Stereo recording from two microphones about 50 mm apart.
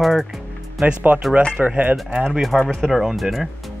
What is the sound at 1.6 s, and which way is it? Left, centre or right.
Speech, right.